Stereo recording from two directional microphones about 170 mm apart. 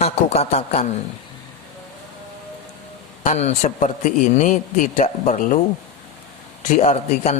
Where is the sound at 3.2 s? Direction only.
45° left (ahead or behind).